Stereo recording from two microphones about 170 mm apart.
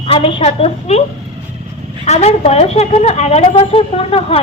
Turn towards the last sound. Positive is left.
turn(degrees=35)  # may be behind; listen again after turning